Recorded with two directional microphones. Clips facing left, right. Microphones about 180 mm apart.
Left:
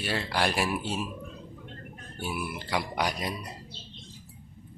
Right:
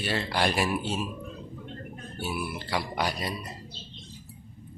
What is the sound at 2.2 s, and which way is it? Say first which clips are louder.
Speech: right 1 dB; 15° left (ahead or behind).